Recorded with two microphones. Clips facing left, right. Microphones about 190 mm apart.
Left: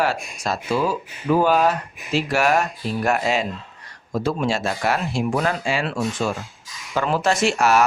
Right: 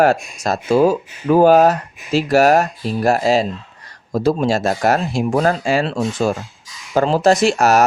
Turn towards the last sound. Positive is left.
turn(degrees=-40)  # may be behind; listen again after turning